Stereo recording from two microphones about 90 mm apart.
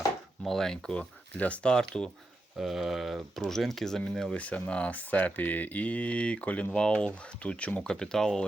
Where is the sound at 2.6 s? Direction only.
5° right (ahead or behind).